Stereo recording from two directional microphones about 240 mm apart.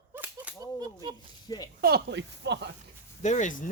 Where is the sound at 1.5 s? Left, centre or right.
Centre.